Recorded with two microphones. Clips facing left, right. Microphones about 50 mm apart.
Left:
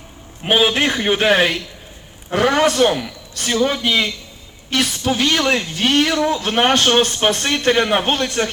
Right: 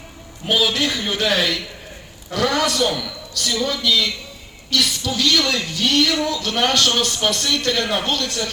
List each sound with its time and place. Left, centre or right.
0.4 s speech: left